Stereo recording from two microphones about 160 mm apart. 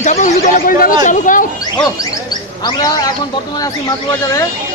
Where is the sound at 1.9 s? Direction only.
25° left (ahead or behind).